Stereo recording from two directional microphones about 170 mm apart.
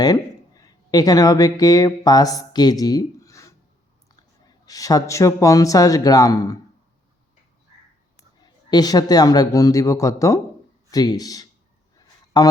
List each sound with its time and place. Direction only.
0.0 s a man's voice: 20° left (ahead or behind)
8.4 s a man's voice: 25° left (ahead or behind)
11.9 s a sound: 25° left (ahead or behind)